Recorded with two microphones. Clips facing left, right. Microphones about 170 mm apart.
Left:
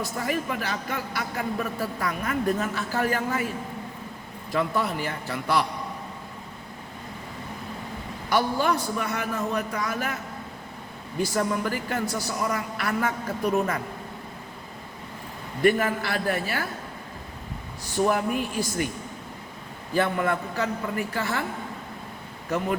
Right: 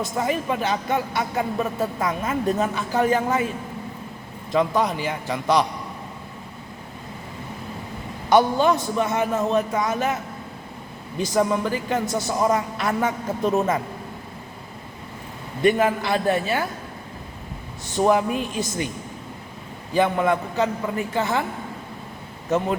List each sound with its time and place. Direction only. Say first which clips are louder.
0.0 s a man's voice: right 4 dB; 20° right (ahead or behind)
4.5 s a man's voice: right 5 dB; 15° right (ahead or behind)
8.3 s a man's voice: right 6 dB; 20° right (ahead or behind)
11.2 s a man's voice: right 4 dB; 20° right (ahead or behind)
15.6 s a man's voice: right 3 dB; 20° right (ahead or behind)
18.1 s a man's voice: right 4 dB; 20° right (ahead or behind)
19.9 s a man's voice: right 4 dB; 15° right (ahead or behind)
22.5 s a man's voice: right 5 dB; 20° right (ahead or behind)